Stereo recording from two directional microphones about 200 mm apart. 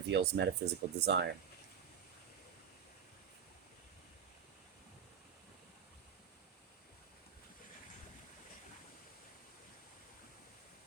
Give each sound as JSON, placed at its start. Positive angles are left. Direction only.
{"t": 0.1, "sound": "speech", "side_deg": -60}